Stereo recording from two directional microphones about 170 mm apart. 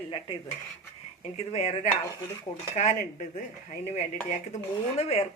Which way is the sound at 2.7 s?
45° left (ahead or behind).